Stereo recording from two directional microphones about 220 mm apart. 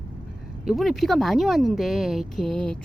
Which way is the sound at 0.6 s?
Centre (ahead or behind).